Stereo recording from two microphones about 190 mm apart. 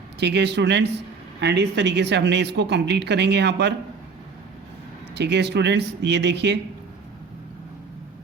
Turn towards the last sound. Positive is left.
turn(degrees=-65)  # may be behind; listen again after turning